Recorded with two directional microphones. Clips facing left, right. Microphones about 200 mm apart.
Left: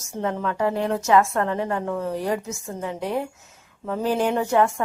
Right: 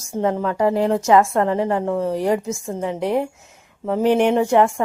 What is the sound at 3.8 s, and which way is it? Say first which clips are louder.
Speech: right 6 dB; 15° right (ahead or behind).